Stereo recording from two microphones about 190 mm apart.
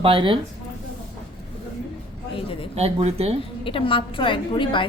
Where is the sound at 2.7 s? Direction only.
35° right (ahead or behind).